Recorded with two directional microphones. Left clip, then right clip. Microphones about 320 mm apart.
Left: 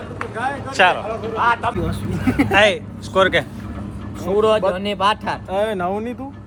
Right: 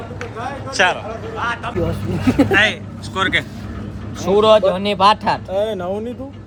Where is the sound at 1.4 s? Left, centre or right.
Centre.